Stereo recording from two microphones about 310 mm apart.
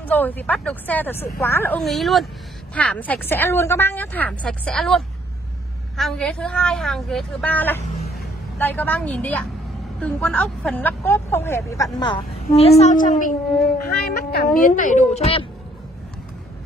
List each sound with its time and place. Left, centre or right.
0.0 s a woman's voice: centre